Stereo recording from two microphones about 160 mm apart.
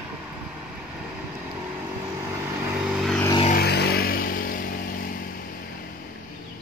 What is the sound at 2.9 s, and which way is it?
Vehicle, centre (ahead or behind).